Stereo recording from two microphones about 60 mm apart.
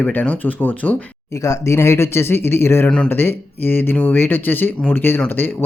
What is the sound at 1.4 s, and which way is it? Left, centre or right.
Speech, left.